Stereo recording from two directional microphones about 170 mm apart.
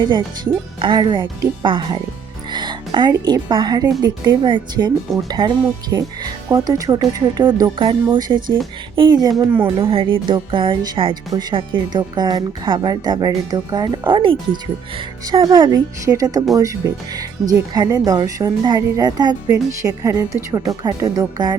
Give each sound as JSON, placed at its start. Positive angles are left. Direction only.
{"t": 0.8, "sound": "a woman's voice", "side_deg": -30}
{"t": 9.5, "sound": "speech", "side_deg": -15}
{"t": 9.8, "sound": "a woman's voice", "side_deg": -30}